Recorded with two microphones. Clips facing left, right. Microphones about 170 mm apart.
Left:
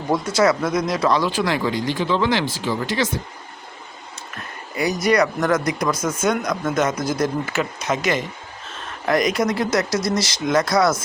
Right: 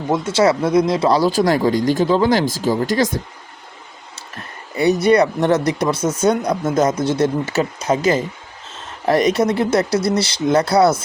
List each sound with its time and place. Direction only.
0.1 s speech: 25° right (ahead or behind)
5.0 s speech: 30° right (ahead or behind)